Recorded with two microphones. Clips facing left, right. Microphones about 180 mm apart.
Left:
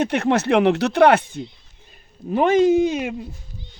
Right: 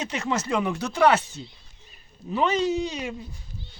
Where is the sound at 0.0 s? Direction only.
60° left (ahead or behind).